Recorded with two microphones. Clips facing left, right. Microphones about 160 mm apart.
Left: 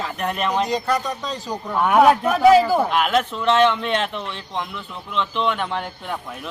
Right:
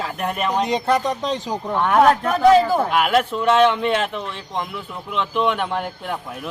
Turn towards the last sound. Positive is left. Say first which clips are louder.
# right 2 dB
turn(degrees=-5)  # may be behind; listen again after turning